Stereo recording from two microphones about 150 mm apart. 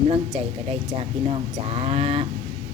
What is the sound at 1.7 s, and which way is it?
Speech, 40° right (ahead or behind).